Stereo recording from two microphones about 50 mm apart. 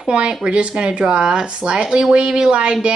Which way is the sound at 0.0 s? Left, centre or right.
Centre.